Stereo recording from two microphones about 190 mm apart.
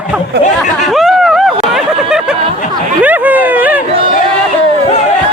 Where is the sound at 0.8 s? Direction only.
Centre (ahead or behind).